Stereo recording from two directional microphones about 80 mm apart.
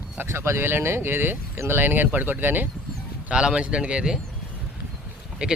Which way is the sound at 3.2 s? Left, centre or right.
Centre.